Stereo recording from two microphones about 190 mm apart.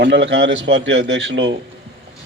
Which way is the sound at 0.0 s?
65° right (ahead or behind).